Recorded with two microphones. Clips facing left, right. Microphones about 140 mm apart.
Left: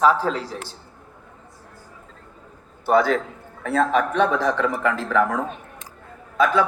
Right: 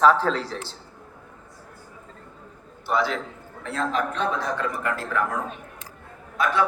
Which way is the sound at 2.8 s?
45° left (ahead or behind).